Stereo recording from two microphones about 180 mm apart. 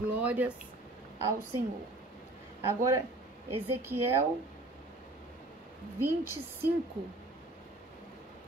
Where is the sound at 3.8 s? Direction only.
15° right (ahead or behind).